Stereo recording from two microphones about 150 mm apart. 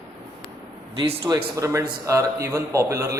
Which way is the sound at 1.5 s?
20° right (ahead or behind).